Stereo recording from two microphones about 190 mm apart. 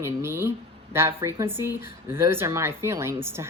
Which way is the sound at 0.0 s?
10° right (ahead or behind).